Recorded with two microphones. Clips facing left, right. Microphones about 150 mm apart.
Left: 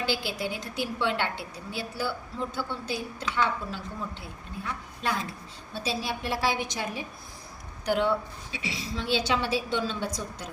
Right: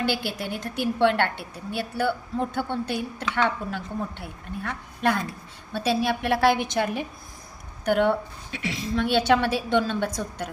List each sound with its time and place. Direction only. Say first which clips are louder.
0.0 s a woman's voice: right 3 dB; 55° right (ahead or behind)